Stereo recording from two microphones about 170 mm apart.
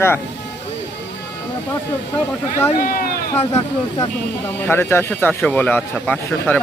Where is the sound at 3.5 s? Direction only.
20° left (ahead or behind).